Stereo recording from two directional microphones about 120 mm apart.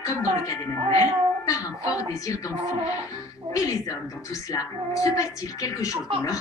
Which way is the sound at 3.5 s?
30° left (ahead or behind).